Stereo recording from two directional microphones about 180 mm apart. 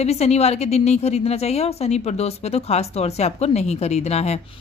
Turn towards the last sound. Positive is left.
turn(degrees=35)  # may be behind; listen again after turning